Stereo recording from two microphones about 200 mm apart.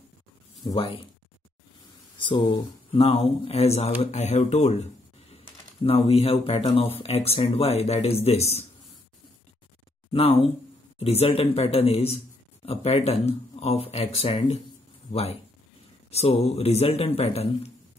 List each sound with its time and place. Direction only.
0.7 s speech: 25° left (ahead or behind)
2.1 s speech: 25° left (ahead or behind)
5.9 s speech: 30° left (ahead or behind)
10.1 s speech: 30° left (ahead or behind)